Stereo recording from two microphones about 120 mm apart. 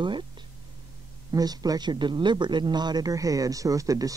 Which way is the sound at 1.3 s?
30° right (ahead or behind).